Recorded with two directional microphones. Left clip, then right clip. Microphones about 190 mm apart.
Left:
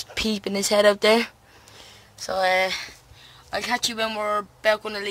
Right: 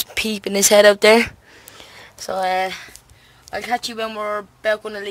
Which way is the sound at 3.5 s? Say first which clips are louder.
Right 2 dB; centre (ahead or behind).